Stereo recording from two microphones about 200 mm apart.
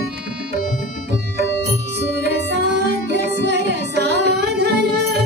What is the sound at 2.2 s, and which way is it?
Music, 55° right (ahead or behind).